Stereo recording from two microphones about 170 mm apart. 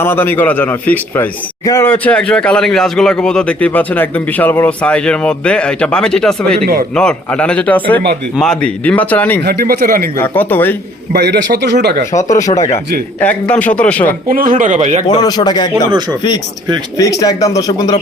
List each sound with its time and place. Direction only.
0.0 s a man's voice: 15° left (ahead or behind)
9.4 s speech: 70° right (ahead or behind)
10.2 s a man's voice: 10° left (ahead or behind)
11.1 s speech: 75° right (ahead or behind)
12.1 s speech: 20° left (ahead or behind)
12.5 s a man's voice: 40° left (ahead or behind)
13.1 s a man's voice: 10° left (ahead or behind)
14.3 s speech: 55° right (ahead or behind)
15.0 s speech: 25° left (ahead or behind)
15.9 s speech: 25° right (ahead or behind)
17.0 s speech: 20° left (ahead or behind)